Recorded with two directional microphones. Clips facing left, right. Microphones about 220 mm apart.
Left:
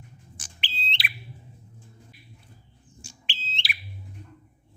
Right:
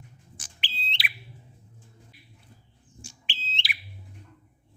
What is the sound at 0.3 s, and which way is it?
Bird, 5° right (ahead or behind).